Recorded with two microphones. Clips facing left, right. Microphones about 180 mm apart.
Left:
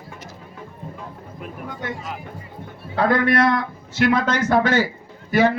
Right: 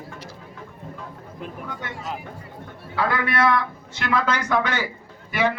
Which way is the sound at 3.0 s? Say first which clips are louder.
Left 5 dB; 45° left (ahead or behind).